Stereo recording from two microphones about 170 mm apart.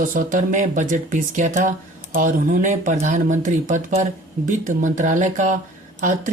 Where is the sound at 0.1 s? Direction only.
50° right (ahead or behind).